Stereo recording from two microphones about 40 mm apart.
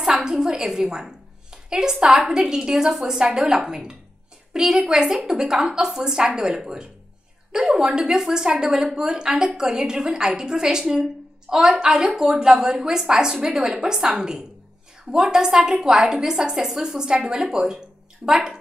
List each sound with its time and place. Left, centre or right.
0.0 s a sound: centre
2.2 s a woman's voice: centre
15.0 s a woman's voice: right
15.3 s a woman's voice: centre